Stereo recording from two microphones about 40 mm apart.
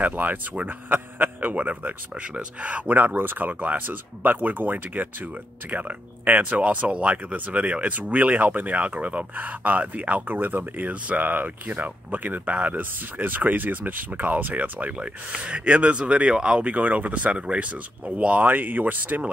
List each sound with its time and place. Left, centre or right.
0.0 s speech: right
10.2 s speech: right
16.7 s speech: right